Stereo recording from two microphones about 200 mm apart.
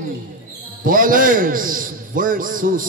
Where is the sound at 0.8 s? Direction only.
45° right (ahead or behind).